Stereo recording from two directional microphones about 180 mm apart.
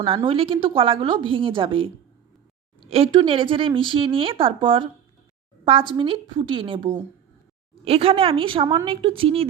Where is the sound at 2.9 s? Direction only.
30° right (ahead or behind).